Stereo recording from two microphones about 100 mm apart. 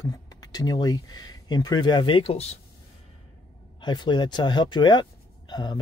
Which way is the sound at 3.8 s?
50° left (ahead or behind).